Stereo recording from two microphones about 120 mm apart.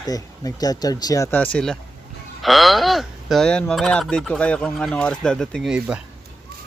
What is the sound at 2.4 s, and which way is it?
Speech, centre (ahead or behind).